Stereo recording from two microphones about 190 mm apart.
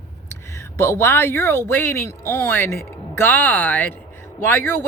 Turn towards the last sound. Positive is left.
turn(degrees=10)  # may be behind; listen again after turning